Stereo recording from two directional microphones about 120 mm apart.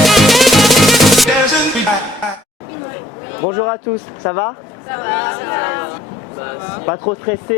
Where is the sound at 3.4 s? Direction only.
20° left (ahead or behind).